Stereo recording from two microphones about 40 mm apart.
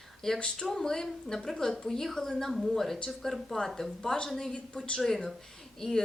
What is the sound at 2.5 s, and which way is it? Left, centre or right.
Speech, centre.